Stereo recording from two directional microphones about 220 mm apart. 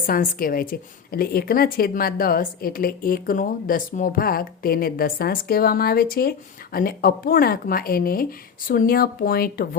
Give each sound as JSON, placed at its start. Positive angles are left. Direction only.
{"t": 0.1, "sound": "a woman's voice", "side_deg": 40}